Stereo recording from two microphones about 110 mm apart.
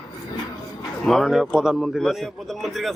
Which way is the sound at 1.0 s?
5° left (ahead or behind).